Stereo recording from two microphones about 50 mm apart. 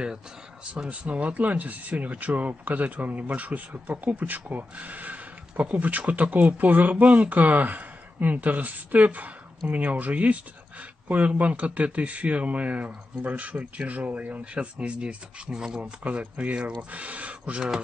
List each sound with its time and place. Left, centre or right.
0.8 s speech: right; by 15.9 s centre
16.0 s speech: right